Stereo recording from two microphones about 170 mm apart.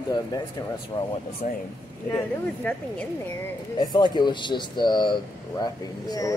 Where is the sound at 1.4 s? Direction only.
45° left (ahead or behind).